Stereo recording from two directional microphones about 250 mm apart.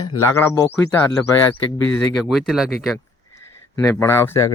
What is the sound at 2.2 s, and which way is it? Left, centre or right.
Speech, centre.